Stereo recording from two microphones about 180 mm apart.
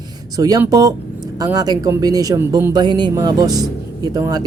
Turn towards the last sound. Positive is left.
turn(degrees=-20)  # may be behind; listen again after turning